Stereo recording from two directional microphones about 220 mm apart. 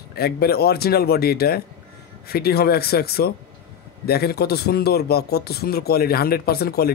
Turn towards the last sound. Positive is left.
turn(degrees=45)  # may be behind; listen again after turning